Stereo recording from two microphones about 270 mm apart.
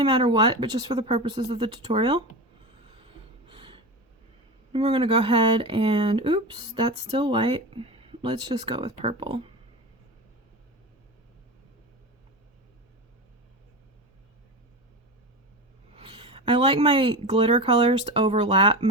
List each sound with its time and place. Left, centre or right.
0.0 s speech: centre
3.0 s a sound: centre
4.7 s speech: right
16.0 s speech: centre